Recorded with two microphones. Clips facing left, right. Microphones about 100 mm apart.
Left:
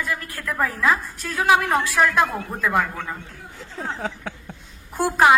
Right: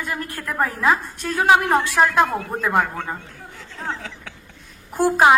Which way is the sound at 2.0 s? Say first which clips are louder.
Right 1 dB; 35° right (ahead or behind).